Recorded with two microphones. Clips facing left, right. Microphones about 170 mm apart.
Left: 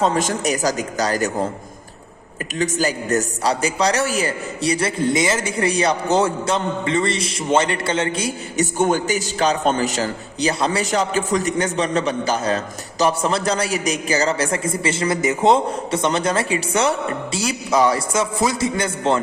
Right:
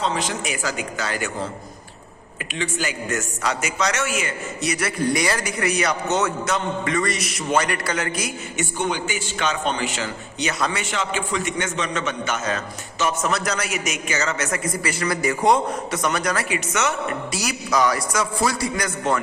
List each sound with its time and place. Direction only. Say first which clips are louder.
0.0 s a man's voice: left 6 dB; 45° left (ahead or behind)
2.6 s a man's voice: left 6 dB; 40° left (ahead or behind)
8.8 s a man's voice: left 7 dB; 45° left (ahead or behind); by 19.2 s 25° left (ahead or behind)